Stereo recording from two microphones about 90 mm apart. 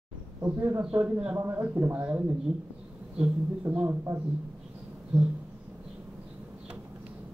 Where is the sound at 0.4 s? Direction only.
25° right (ahead or behind).